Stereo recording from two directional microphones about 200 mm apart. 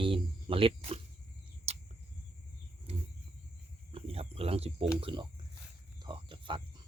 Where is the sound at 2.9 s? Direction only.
30° right (ahead or behind).